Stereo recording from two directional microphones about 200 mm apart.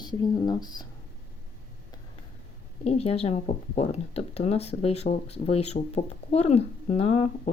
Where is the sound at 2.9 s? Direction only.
30° left (ahead or behind).